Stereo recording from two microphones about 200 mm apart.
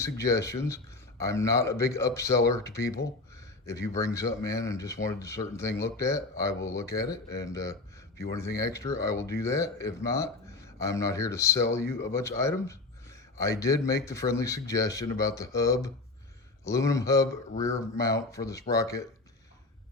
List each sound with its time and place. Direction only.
0.0 s speech: 15° left (ahead or behind)